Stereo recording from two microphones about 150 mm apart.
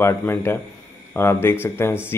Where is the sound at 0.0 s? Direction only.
15° left (ahead or behind).